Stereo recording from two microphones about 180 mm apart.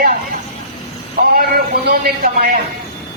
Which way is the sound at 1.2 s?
55° right (ahead or behind).